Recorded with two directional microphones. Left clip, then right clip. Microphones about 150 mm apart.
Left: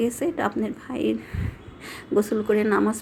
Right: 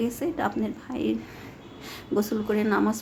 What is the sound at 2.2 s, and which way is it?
Speech, 15° left (ahead or behind).